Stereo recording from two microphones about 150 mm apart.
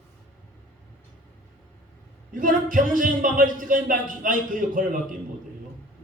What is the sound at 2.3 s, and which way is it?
A man's voice, 65° right (ahead or behind).